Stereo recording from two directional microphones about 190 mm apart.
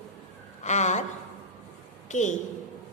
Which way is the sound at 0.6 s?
40° left (ahead or behind).